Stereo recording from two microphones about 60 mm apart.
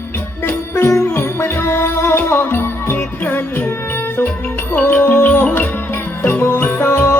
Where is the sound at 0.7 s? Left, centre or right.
Left.